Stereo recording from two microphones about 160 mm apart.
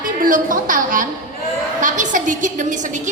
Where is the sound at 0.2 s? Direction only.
55° right (ahead or behind).